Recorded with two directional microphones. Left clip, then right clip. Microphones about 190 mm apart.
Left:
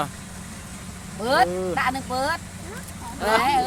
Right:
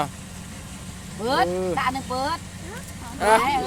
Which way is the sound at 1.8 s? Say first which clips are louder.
Left 1 dB; 35° left (ahead or behind).